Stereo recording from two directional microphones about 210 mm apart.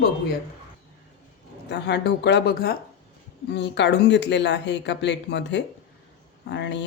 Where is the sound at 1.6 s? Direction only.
55° left (ahead or behind).